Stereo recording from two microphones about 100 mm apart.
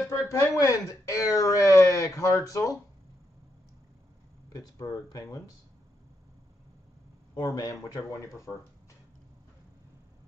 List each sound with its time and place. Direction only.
0.1 s speech: 30° left (ahead or behind)
4.5 s speech: 40° left (ahead or behind)
7.3 s speech: 40° left (ahead or behind)